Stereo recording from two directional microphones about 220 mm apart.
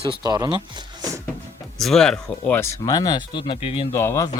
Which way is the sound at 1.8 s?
Centre (ahead or behind).